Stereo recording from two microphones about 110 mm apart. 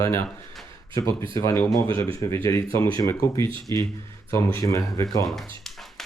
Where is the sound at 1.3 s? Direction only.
30° left (ahead or behind).